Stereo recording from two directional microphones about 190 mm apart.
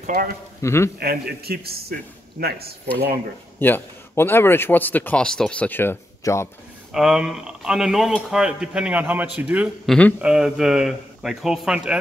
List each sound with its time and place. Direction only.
0.0 s speech: 50° right (ahead or behind)
0.6 s speech: 15° left (ahead or behind)
0.9 s speech: 55° right (ahead or behind)
3.5 s speech: 10° left (ahead or behind)
6.9 s speech: 5° right (ahead or behind)